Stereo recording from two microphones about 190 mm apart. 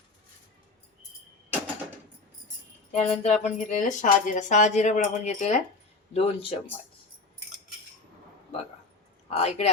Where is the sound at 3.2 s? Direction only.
35° left (ahead or behind).